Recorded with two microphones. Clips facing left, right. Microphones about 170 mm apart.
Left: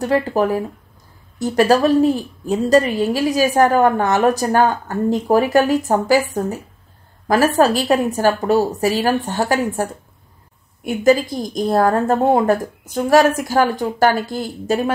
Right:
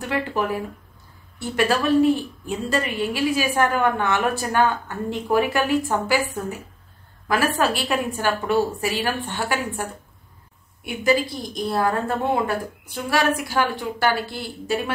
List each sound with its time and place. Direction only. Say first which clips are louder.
0.0 s a woman's voice: left 7 dB; 40° left (ahead or behind)
7.5 s a woman's voice: left 7 dB; 40° left (ahead or behind)